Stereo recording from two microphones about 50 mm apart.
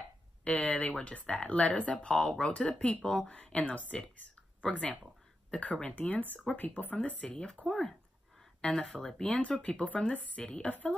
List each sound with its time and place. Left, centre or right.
0.4 s speech: left
3.3 s speech: left
7.2 s speech: centre
7.6 s speech: centre
9.2 s speech: left